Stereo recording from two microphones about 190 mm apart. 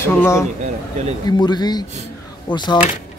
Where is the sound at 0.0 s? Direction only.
15° left (ahead or behind).